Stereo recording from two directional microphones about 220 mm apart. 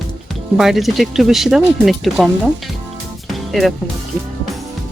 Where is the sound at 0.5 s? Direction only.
Centre (ahead or behind).